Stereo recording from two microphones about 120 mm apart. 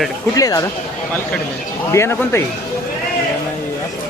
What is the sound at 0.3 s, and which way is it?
Speech, 30° left (ahead or behind).